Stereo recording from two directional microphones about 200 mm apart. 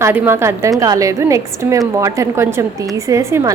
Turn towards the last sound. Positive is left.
turn(degrees=-15)  # may be behind; listen again after turning